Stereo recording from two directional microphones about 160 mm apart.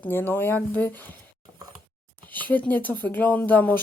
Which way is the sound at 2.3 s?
10° left (ahead or behind).